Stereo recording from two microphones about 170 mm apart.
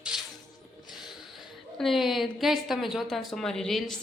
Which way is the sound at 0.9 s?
Centre (ahead or behind).